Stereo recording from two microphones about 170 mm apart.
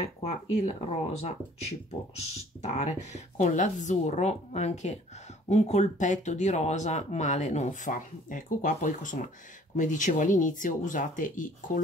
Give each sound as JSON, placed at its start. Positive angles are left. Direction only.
{"t": 0.2, "sound": "speech", "side_deg": 40}